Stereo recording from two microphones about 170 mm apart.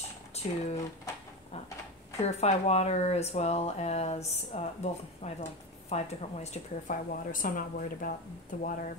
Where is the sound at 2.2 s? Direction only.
40° left (ahead or behind).